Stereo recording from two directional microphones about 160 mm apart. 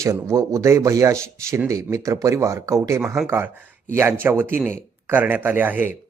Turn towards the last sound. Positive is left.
turn(degrees=-10)  # may be behind; listen again after turning